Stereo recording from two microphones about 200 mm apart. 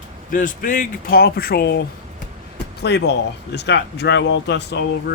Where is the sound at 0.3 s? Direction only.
40° left (ahead or behind).